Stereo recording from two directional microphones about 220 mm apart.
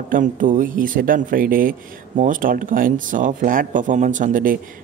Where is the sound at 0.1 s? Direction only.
35° right (ahead or behind).